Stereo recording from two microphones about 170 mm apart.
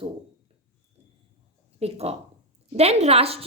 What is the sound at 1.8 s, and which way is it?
A woman's voice, 35° right (ahead or behind).